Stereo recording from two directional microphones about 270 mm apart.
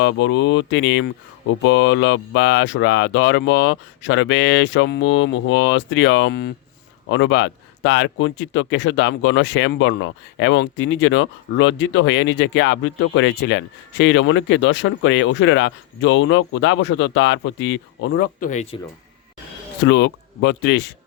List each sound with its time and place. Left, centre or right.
0.0 s speech: left
18.3 s speech: left
19.8 s speech: left